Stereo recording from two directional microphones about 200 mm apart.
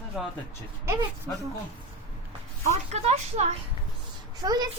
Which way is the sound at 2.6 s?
35° right (ahead or behind).